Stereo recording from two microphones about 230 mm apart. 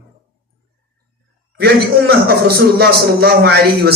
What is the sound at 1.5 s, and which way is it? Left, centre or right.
A man's voice, right.